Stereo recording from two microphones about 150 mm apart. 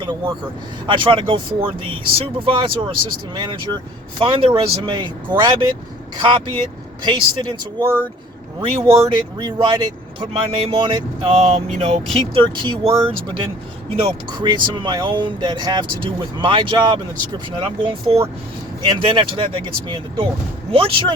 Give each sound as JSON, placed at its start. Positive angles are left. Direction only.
{"t": 0.9, "sound": "speech", "side_deg": -35}
{"t": 11.3, "sound": "speech", "side_deg": -50}
{"t": 12.0, "sound": "speech", "side_deg": 0}
{"t": 12.3, "sound": "speech", "side_deg": -30}
{"t": 14.3, "sound": "speech", "side_deg": -30}